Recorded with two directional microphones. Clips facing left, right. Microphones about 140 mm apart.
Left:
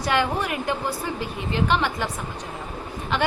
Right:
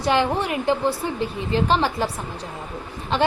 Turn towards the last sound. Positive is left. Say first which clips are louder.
# right 3 dB
turn(degrees=-30)  # may be behind; listen again after turning